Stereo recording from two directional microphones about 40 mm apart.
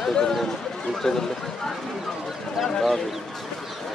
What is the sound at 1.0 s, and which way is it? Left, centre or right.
Speech, centre.